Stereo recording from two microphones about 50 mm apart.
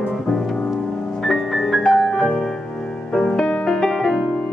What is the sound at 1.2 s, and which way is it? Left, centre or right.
Music, centre.